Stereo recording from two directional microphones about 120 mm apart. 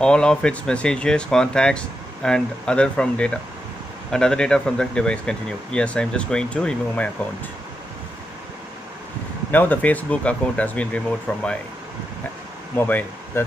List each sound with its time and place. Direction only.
0.0 s speech: 5° left (ahead or behind)
9.5 s speech: 15° left (ahead or behind)
12.7 s speech: 15° left (ahead or behind)